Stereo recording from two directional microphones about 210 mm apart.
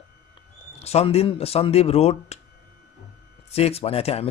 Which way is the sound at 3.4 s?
30° left (ahead or behind).